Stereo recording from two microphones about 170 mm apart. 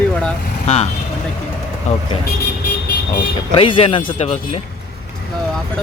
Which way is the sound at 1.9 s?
40° left (ahead or behind).